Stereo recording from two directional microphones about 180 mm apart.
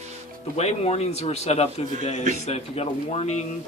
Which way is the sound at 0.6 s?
35° left (ahead or behind).